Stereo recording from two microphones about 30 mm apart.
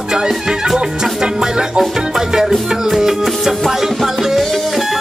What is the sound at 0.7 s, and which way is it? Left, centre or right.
Music, right.